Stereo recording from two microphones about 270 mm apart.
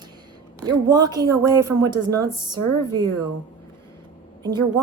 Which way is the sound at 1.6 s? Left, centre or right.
Right.